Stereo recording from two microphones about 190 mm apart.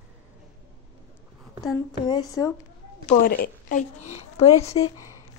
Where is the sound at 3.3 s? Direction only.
50° left (ahead or behind).